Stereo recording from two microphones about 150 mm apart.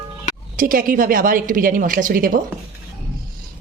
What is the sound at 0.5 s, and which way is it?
A woman's voice, 70° right (ahead or behind).